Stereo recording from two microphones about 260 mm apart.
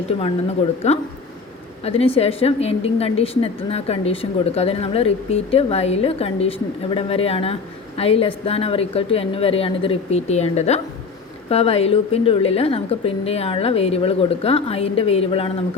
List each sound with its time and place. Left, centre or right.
0.8 s a woman's voice: left